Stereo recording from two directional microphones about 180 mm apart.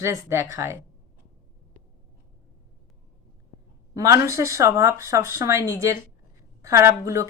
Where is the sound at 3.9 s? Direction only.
20° right (ahead or behind).